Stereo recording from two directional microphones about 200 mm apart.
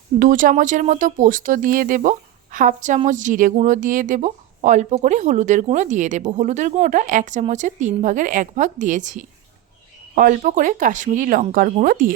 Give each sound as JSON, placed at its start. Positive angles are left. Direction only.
{"t": 0.2, "sound": "speech", "side_deg": -40}